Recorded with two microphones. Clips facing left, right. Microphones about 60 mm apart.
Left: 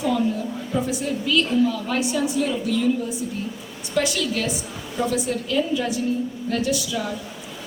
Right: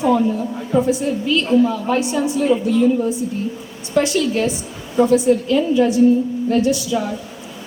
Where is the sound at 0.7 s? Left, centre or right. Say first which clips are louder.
Right 8 dB; right.